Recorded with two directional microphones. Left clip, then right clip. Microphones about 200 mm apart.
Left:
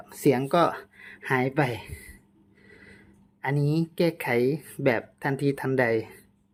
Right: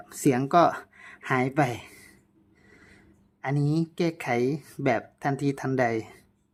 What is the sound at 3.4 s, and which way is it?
Speech, 10° right (ahead or behind).